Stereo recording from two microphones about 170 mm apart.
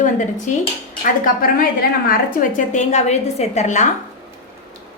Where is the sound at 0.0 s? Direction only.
45° left (ahead or behind).